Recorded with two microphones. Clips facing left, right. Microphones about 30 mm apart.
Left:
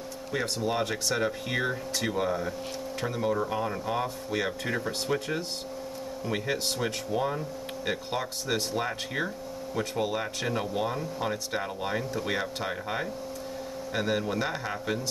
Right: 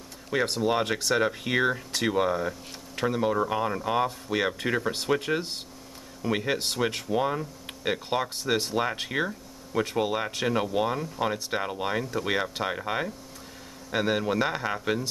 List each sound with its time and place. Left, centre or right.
0.3 s speech: centre